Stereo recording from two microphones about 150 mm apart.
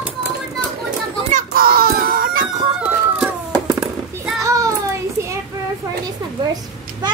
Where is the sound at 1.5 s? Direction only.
80° right.